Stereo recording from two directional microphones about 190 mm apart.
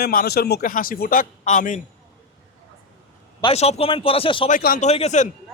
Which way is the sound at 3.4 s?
35° left (ahead or behind).